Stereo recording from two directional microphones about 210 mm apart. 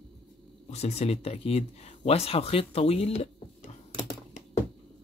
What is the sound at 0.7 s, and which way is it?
Speech, 30° left (ahead or behind).